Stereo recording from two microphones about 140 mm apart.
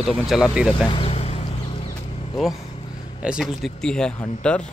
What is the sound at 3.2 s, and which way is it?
Speech, 5° right (ahead or behind).